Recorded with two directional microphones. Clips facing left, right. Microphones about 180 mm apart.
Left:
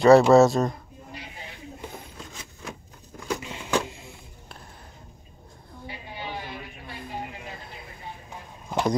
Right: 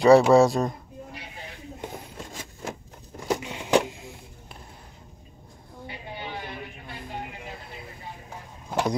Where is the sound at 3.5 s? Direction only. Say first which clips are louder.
Right 5 dB; 15° right (ahead or behind).